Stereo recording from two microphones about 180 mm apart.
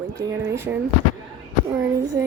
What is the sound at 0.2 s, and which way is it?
Speech, 15° right (ahead or behind).